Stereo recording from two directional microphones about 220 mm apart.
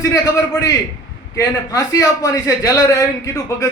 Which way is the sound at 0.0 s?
15° left (ahead or behind).